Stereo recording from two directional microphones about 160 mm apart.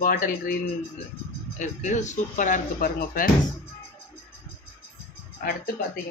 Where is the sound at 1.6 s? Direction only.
50° left (ahead or behind).